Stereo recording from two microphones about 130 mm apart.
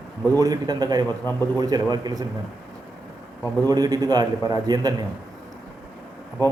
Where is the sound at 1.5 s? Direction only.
30° right (ahead or behind).